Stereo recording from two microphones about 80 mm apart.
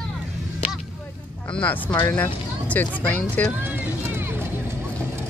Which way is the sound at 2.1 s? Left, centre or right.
Centre.